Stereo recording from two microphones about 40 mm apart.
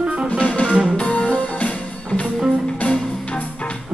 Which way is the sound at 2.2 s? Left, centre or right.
Centre.